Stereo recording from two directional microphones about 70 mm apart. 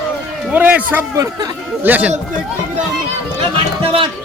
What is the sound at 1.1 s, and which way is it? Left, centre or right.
Speech, right.